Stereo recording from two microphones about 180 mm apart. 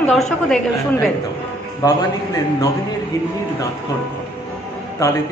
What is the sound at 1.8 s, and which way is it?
Speech, 20° left (ahead or behind).